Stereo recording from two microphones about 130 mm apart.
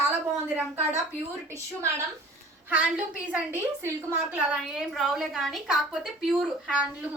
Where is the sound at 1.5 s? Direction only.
20° right (ahead or behind).